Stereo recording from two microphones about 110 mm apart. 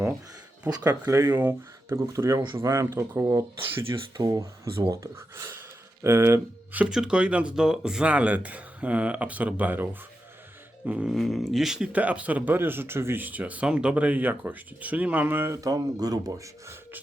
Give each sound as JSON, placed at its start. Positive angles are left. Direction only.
{"t": 0.7, "sound": "speech", "side_deg": -30}
{"t": 4.2, "sound": "speech", "side_deg": -30}
{"t": 6.9, "sound": "speech", "side_deg": -10}